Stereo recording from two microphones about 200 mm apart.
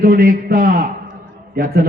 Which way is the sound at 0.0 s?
45° right (ahead or behind).